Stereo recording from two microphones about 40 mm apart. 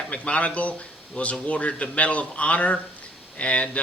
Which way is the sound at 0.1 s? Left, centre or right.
Left.